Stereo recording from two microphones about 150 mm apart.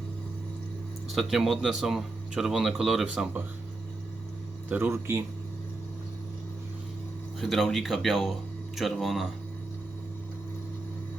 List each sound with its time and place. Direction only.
1.1 s speech: centre (ahead or behind)
4.7 s speech: 15° right (ahead or behind)
7.3 s speech: centre (ahead or behind)